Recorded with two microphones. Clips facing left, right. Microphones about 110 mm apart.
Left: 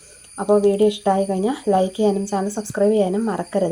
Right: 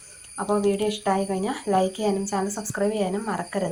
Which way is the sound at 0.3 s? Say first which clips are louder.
Left 7 dB; 20° left (ahead or behind).